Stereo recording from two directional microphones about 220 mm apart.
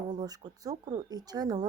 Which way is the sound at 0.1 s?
15° right (ahead or behind).